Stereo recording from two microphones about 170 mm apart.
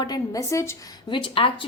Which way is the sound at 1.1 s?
30° left (ahead or behind).